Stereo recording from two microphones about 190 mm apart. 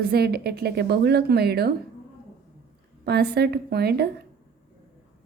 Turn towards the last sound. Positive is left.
turn(degrees=-55)  # may be behind; listen again after turning